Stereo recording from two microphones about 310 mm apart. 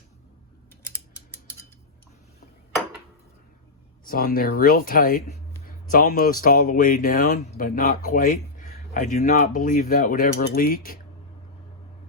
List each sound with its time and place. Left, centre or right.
0.8 s scissors: centre
4.0 s speech: left